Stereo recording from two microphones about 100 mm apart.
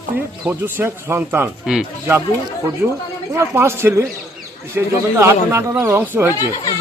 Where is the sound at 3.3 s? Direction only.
25° right (ahead or behind).